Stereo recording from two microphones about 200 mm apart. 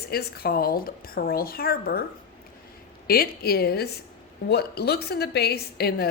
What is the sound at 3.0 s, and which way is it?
A woman's voice, 45° left (ahead or behind).